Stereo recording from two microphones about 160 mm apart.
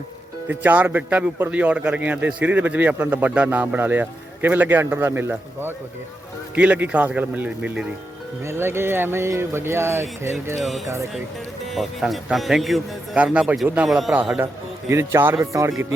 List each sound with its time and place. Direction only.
0.4 s a man's voice: 10° right (ahead or behind)
10.6 s a man's voice: centre (ahead or behind)
10.8 s a man's voice: 20° right (ahead or behind)
11.7 s a man's voice: centre (ahead or behind)